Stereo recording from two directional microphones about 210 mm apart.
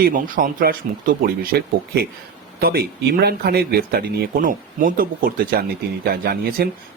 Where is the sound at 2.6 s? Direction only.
45° right (ahead or behind).